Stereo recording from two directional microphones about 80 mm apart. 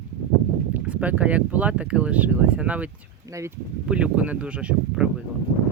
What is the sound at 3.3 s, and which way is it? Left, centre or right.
Speech, right.